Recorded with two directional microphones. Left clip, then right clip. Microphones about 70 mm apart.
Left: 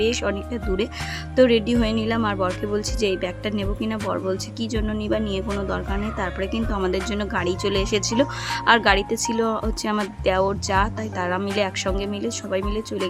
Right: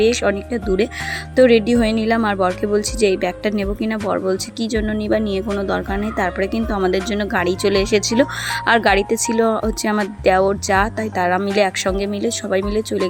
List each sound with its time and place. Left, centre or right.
0.0 s speech: right
3.5 s speech: right
6.7 s speech: right
7.3 s speech: right